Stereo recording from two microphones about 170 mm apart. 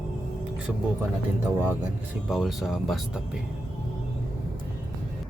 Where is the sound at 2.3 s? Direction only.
Centre (ahead or behind).